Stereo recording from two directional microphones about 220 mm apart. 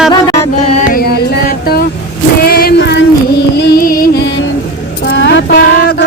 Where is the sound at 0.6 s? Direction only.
30° left (ahead or behind).